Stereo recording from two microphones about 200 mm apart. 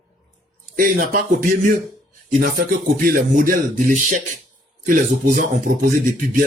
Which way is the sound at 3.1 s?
45° right (ahead or behind).